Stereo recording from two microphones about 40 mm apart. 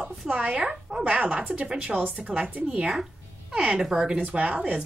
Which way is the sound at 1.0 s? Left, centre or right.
Right.